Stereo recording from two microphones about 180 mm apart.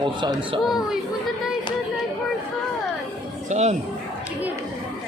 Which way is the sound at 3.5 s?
40° right (ahead or behind).